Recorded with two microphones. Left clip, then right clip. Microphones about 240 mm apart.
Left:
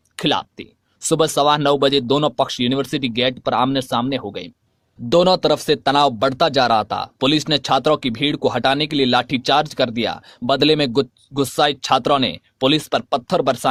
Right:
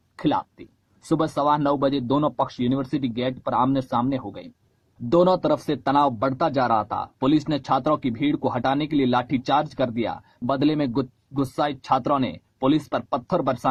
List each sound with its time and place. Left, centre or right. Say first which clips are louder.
0.2 s speech: left 4 dB; left